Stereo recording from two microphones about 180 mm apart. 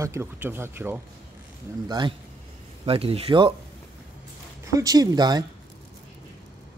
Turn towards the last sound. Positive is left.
turn(degrees=-20)  # may be behind; listen again after turning